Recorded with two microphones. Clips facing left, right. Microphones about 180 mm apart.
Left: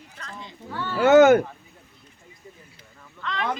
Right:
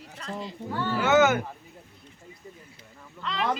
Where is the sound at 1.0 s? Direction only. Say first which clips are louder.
Left 8 dB; 55° left (ahead or behind).